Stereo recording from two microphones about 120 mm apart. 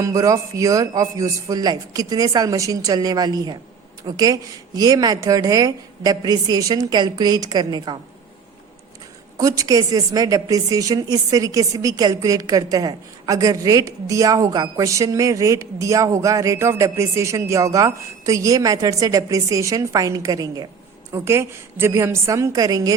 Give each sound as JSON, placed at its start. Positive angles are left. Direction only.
{"t": 0.0, "sound": "a woman's voice", "side_deg": -30}
{"t": 9.4, "sound": "a woman's voice", "side_deg": -30}